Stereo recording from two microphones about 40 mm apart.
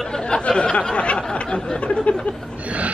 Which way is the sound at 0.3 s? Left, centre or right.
Left.